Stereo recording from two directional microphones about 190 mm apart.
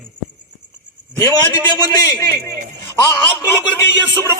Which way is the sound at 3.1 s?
10° left (ahead or behind).